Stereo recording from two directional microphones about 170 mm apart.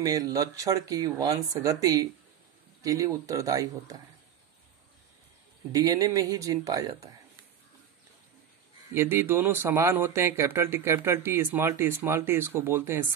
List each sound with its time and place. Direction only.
0.0 s speech: 20° right (ahead or behind)
5.7 s speech: 20° right (ahead or behind)
8.9 s speech: 15° right (ahead or behind)